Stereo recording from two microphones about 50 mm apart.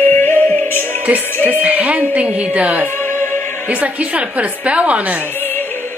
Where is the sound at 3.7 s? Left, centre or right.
Right.